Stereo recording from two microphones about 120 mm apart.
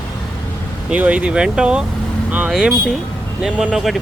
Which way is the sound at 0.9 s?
10° right (ahead or behind).